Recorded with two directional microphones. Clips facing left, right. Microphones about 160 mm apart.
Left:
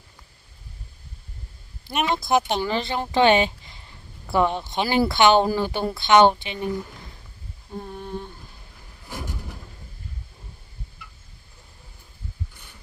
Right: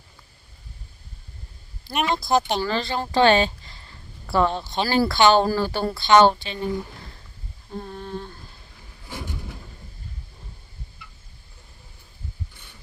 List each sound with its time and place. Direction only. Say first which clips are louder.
1.9 s speech: even; centre (ahead or behind)
2.6 s a woman's voice: even; 20° left (ahead or behind)
7.7 s humming: even; 10° left (ahead or behind)
9.0 s a sound: even; 5° left (ahead or behind)